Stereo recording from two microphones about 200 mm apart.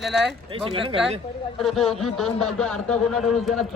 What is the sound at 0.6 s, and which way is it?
Speech, 30° right (ahead or behind).